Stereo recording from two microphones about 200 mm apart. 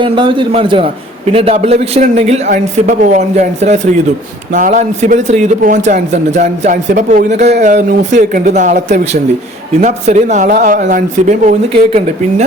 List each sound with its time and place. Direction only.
0.0 s a man's voice: 25° right (ahead or behind)